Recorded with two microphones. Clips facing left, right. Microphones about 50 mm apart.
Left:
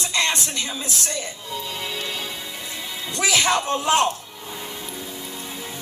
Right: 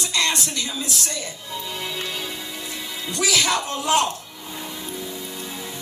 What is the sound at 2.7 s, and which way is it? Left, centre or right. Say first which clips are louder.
Speech: even; left.